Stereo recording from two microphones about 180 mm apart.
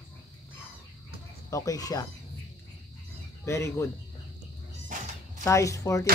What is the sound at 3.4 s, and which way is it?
Speech, 15° left (ahead or behind).